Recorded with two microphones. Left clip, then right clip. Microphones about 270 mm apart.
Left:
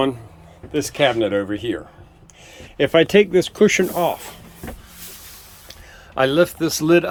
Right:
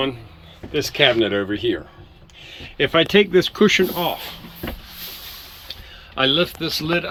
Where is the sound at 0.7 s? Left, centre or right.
Centre.